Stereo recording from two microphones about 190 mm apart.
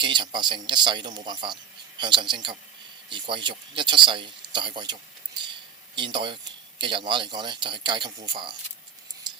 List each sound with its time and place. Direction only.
0.0 s speech: 25° right (ahead or behind)
6.0 s speech: 25° right (ahead or behind)